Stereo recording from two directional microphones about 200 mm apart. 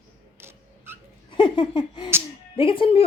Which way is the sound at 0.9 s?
10° right (ahead or behind).